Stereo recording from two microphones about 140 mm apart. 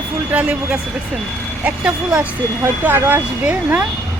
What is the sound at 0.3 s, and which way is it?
Speech, 10° right (ahead or behind).